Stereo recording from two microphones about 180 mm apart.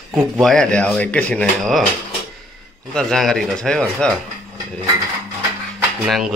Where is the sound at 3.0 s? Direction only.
Centre (ahead or behind).